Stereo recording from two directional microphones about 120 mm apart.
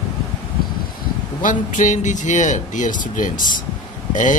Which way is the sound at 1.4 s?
90° left.